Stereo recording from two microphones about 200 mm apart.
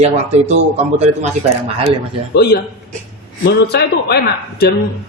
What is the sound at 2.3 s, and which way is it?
A man's voice, 55° left (ahead or behind).